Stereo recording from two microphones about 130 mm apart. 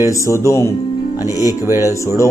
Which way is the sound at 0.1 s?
25° left (ahead or behind).